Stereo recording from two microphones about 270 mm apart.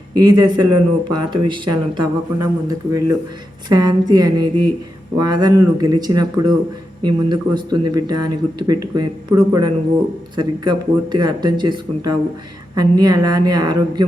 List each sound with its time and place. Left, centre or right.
0.1 s speech: centre